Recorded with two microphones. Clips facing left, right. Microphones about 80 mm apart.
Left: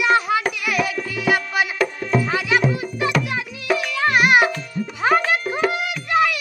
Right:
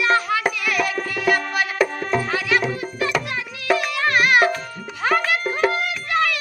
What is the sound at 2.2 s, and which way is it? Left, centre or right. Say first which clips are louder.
Music: left 3 dB; centre.